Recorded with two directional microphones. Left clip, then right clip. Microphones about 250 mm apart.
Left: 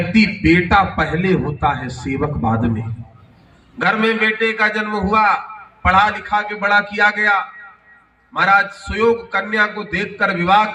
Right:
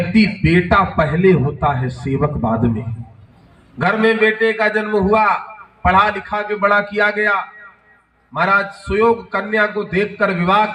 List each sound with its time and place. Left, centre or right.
0.1 s a man's voice: left
3.8 s a man's voice: left
8.4 s a man's voice: left